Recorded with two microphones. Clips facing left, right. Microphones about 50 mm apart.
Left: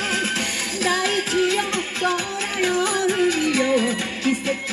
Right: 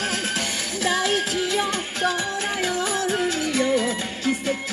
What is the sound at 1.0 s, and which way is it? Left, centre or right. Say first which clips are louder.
Music: left 3 dB; left.